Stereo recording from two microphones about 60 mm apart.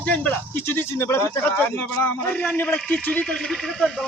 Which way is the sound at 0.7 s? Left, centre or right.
Left.